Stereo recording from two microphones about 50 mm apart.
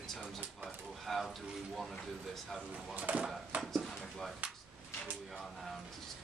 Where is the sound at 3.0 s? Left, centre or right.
Right.